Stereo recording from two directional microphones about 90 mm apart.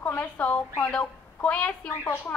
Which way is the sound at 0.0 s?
15° left (ahead or behind).